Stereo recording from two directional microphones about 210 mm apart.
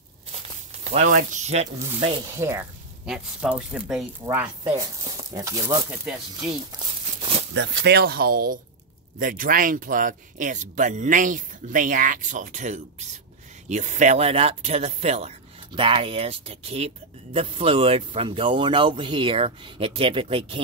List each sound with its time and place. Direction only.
0.8 s speech: 35° right (ahead or behind)
1.8 s speech: 25° right (ahead or behind)
3.1 s speech: 5° right (ahead or behind)
6.4 s a sound: 25° right (ahead or behind)
7.5 s speech: 55° right (ahead or behind); by 20.6 s 25° right (ahead or behind)